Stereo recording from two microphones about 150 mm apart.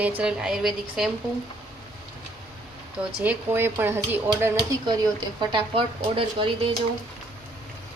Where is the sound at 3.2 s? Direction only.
15° right (ahead or behind).